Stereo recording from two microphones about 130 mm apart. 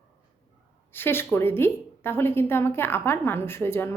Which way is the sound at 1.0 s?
15° left (ahead or behind).